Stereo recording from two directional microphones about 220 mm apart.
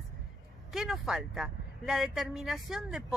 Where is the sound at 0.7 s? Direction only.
Centre (ahead or behind).